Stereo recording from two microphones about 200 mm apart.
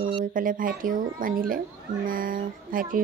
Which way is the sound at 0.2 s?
45° right (ahead or behind).